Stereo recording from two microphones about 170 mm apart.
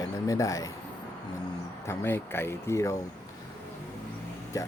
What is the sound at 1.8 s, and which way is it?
Speech, 15° left (ahead or behind).